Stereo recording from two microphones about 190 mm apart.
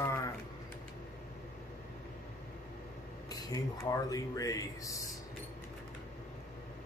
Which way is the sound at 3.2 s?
20° left (ahead or behind).